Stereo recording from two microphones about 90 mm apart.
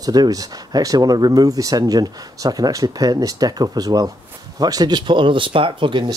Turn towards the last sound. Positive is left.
turn(degrees=-65)  # may be behind; listen again after turning